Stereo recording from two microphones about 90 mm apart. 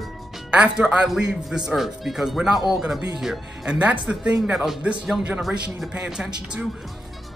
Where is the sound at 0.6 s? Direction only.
10° right (ahead or behind).